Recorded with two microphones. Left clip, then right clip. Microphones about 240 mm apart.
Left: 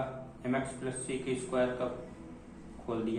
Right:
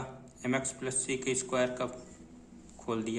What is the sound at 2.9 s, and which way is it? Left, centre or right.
Speech, right.